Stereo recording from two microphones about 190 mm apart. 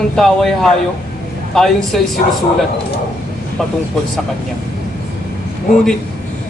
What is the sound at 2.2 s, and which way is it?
Speech, 35° left (ahead or behind).